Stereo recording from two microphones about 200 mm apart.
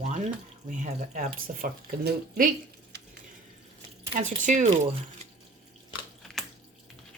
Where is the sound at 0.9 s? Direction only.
40° right (ahead or behind).